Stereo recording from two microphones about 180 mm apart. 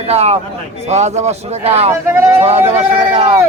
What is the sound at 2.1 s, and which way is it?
Speech, 15° right (ahead or behind).